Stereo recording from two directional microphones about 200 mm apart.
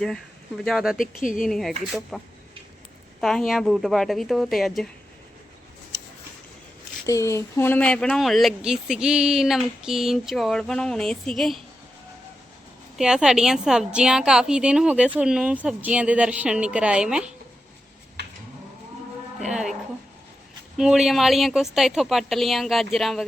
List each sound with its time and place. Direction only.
0.0 s speech: centre (ahead or behind)
0.9 s speech: 40° left (ahead or behind)
1.5 s speech: centre (ahead or behind)
7.0 s speech: 15° left (ahead or behind)
13.0 s speech: 5° right (ahead or behind)
19.5 s speech: 5° right (ahead or behind)
20.7 s speech: 5° right (ahead or behind)